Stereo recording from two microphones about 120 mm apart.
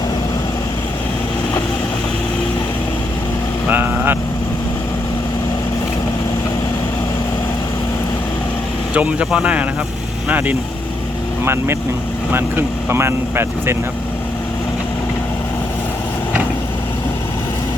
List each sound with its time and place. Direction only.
3.7 s vehicle: 15° right (ahead or behind)
9.0 s speech: 10° right (ahead or behind)